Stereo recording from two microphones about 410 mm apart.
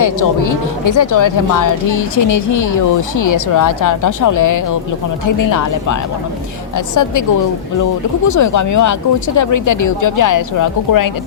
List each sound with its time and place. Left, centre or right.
0.0 s speech: left
8.3 s speech: left